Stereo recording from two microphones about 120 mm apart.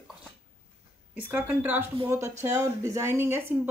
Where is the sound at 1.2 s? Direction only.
15° right (ahead or behind).